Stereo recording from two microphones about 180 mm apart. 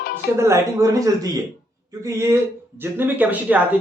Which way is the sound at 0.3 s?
15° right (ahead or behind).